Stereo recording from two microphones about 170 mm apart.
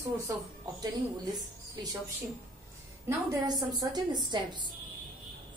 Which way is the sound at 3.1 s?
20° right (ahead or behind).